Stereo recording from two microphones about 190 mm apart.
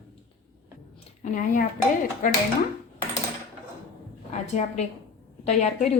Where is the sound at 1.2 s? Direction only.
45° left (ahead or behind).